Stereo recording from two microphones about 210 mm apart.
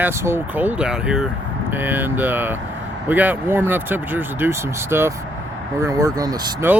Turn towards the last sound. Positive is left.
turn(degrees=-15)  # may be behind; listen again after turning